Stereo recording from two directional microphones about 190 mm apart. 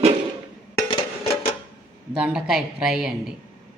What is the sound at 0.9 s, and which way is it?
Music, 30° left (ahead or behind).